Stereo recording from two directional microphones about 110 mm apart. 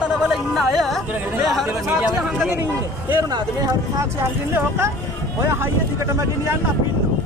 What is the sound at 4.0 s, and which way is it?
Speech, 20° right (ahead or behind).